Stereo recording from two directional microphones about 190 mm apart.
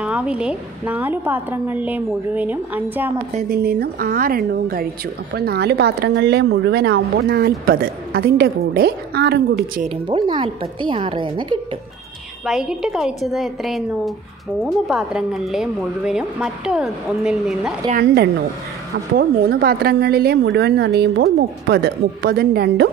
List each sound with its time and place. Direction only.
0.0 s a woman's voice: 5° right (ahead or behind)
3.4 s a woman's voice: 55° right (ahead or behind)
9.8 s speech: 25° right (ahead or behind)
12.4 s speech: centre (ahead or behind)
17.9 s speech: 60° right (ahead or behind)